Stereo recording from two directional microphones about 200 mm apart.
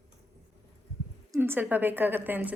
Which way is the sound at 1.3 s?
10° right (ahead or behind).